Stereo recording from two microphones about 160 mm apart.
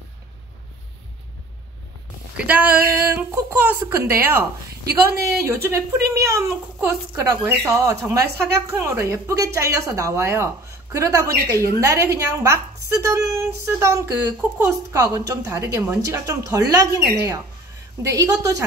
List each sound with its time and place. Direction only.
2.3 s a woman's voice: 10° right (ahead or behind)